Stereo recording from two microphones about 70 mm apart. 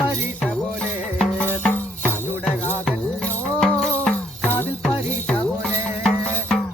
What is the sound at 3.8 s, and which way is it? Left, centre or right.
Music, centre.